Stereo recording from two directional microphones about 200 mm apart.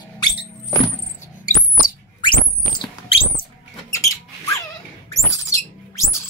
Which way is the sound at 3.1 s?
30° left (ahead or behind).